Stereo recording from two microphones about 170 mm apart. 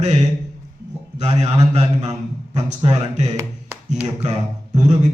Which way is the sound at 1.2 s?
40° right (ahead or behind).